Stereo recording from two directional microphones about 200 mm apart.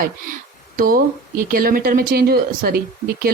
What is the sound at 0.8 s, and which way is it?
Speech, 45° right (ahead or behind).